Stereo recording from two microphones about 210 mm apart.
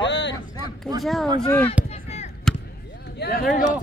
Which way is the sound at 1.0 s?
Centre (ahead or behind).